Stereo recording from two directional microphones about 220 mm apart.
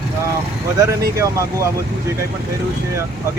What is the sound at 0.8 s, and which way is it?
Speech, 15° right (ahead or behind).